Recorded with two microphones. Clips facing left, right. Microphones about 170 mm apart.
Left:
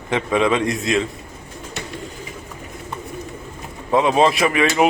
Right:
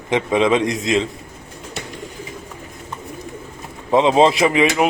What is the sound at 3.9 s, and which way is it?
Speech, 20° right (ahead or behind).